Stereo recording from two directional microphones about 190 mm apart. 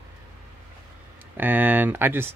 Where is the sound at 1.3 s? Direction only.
10° right (ahead or behind).